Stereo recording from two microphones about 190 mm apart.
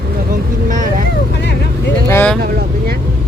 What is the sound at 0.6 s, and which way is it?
Vehicle, 45° right (ahead or behind).